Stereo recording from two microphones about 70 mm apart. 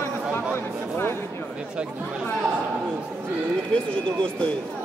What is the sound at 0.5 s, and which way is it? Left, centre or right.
Speech, left.